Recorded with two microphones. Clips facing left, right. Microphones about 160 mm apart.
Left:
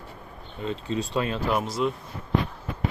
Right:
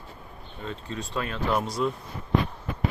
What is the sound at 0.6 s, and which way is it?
Speech, 25° left (ahead or behind).